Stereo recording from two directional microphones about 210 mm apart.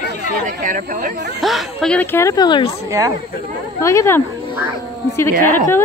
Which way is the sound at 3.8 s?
15° left (ahead or behind).